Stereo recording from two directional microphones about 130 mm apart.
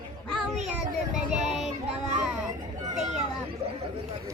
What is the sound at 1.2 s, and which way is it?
Child singing, 5° right (ahead or behind).